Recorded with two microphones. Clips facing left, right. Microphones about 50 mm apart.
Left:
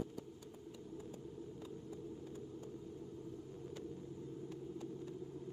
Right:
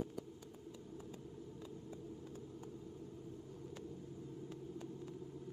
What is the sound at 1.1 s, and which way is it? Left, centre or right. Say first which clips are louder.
Vehicle: left 2 dB; right.